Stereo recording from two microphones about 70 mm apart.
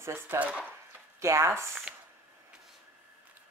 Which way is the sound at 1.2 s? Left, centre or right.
Right.